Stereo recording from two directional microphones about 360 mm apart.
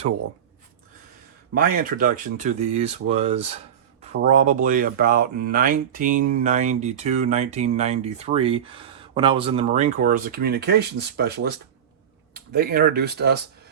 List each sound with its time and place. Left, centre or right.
1.7 s speech: right